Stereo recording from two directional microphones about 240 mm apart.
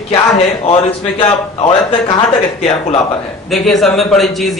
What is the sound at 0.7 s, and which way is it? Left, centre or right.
Speech, left.